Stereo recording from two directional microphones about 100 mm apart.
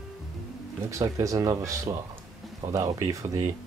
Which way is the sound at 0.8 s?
30° right (ahead or behind).